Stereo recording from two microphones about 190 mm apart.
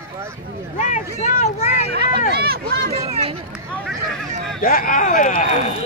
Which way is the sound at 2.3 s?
55° right (ahead or behind).